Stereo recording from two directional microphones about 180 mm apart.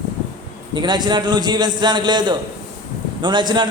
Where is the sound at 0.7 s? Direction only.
25° right (ahead or behind).